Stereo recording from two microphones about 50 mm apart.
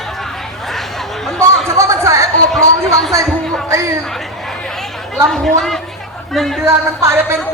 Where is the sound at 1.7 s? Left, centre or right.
Right.